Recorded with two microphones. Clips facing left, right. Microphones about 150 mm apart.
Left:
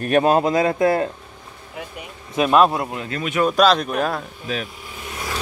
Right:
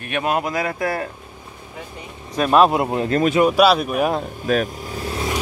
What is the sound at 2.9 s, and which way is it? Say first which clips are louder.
Speech: right 9 dB; 35° right (ahead or behind).